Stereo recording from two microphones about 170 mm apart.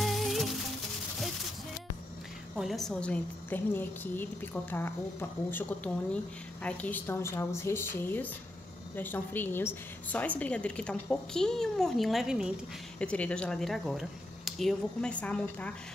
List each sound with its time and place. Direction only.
0.0 s music: centre (ahead or behind)
2.5 s a woman's voice: centre (ahead or behind)